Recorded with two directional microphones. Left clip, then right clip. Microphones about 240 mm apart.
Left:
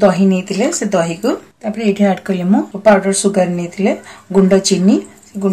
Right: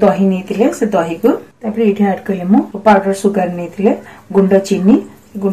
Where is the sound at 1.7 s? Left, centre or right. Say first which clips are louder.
Right 1 dB; left.